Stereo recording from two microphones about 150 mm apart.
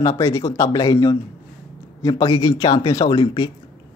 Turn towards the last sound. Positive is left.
turn(degrees=30)  # may be behind; listen again after turning